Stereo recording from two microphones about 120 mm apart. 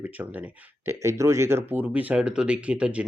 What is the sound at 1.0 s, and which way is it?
Speech, 25° right (ahead or behind).